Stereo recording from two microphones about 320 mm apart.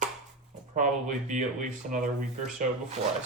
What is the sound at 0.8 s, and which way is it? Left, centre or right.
Speech, right.